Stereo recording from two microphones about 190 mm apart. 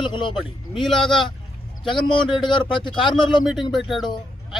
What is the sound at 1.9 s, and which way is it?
Speech, 25° left (ahead or behind).